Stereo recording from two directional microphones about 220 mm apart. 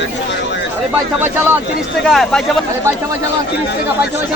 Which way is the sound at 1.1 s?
10° right (ahead or behind).